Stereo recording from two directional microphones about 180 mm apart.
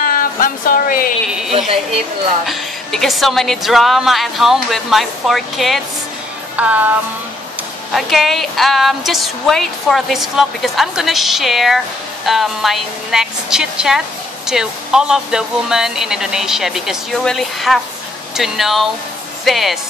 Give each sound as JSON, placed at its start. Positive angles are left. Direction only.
{"t": 0.0, "sound": "a sound", "side_deg": 50}
{"t": 2.4, "sound": "a woman's voice", "side_deg": 0}
{"t": 7.9, "sound": "a woman's voice", "side_deg": 0}